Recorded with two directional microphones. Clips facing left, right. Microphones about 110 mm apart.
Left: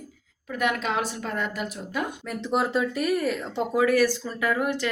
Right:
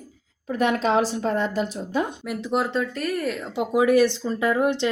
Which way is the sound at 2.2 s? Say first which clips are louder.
Right 1 dB; 5° right (ahead or behind).